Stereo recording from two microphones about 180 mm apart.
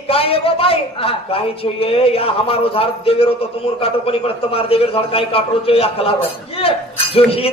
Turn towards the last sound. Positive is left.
turn(degrees=30)  # may be behind; listen again after turning